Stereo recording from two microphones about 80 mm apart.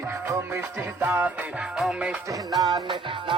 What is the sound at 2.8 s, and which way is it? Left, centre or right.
Music, right.